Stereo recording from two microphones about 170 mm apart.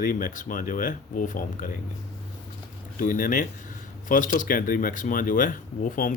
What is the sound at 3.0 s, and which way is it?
Speech, 55° left (ahead or behind).